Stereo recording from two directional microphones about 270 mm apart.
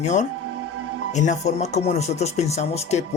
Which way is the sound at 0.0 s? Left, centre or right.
Left.